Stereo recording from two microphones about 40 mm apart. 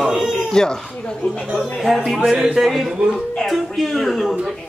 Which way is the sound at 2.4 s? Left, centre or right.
Centre.